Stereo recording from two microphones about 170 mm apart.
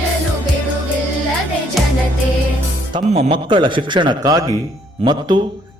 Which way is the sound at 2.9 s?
35° right (ahead or behind).